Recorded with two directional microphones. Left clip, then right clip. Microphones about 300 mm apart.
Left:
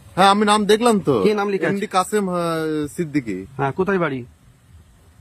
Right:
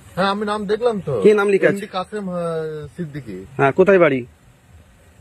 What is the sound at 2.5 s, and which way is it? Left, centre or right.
Speech, left.